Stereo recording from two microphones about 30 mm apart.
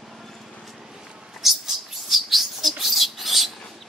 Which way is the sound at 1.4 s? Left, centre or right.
Centre.